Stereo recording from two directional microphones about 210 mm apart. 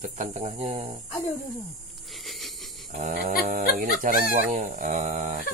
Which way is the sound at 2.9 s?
40° right (ahead or behind).